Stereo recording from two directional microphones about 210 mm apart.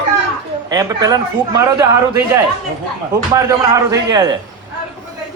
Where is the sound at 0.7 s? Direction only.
15° right (ahead or behind).